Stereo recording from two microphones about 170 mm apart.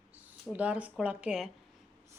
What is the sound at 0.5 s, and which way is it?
Speech, 10° right (ahead or behind).